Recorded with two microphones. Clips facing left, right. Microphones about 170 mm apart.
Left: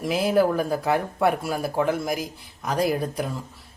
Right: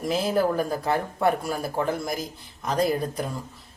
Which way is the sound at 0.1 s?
10° left (ahead or behind).